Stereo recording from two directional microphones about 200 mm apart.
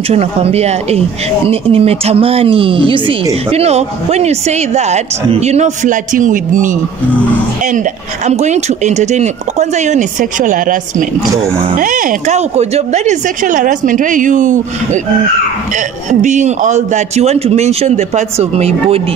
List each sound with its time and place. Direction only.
0.1 s speech: 30° right (ahead or behind)
8.3 s speech: 35° right (ahead or behind)
16.1 s speech: 40° right (ahead or behind)